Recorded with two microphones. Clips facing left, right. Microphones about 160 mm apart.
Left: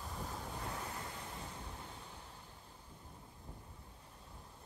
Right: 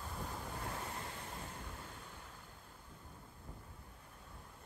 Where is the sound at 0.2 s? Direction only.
5° left (ahead or behind).